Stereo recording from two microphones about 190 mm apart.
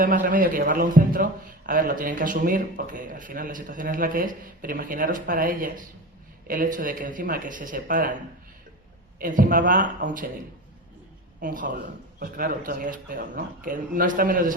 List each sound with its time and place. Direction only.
0.0 s a man's voice: 45° right (ahead or behind)
9.1 s a man's voice: 45° right (ahead or behind)
11.3 s a man's voice: 45° right (ahead or behind)